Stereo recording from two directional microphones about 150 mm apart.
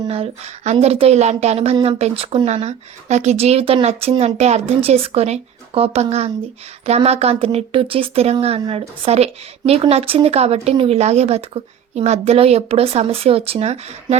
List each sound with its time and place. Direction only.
0.1 s a woman's voice: 45° right (ahead or behind)